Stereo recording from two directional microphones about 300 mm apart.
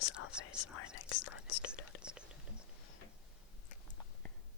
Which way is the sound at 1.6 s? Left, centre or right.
Centre.